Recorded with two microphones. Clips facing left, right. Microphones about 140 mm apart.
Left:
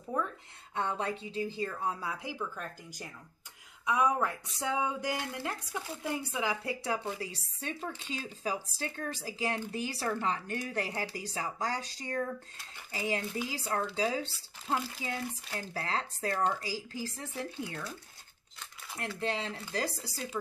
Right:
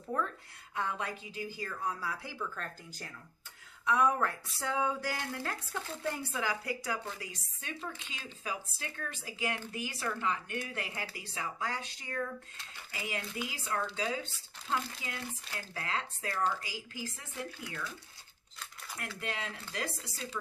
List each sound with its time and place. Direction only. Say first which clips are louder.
0.1 s speech: left 1 dB; 10° left (ahead or behind)
0.7 s speech: left 3 dB; 30° left (ahead or behind)
19.1 s speech: left 6 dB; 30° left (ahead or behind)